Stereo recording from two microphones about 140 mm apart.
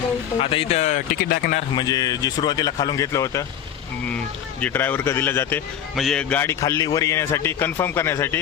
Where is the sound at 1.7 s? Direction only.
25° left (ahead or behind).